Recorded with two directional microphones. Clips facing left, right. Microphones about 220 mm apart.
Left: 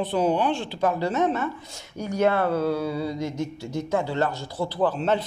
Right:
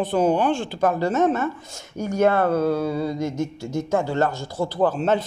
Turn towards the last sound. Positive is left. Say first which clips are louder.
# right 3 dB
turn(degrees=-45)  # may be behind; listen again after turning